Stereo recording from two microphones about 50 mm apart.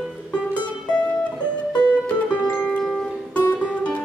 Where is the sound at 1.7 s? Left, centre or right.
Left.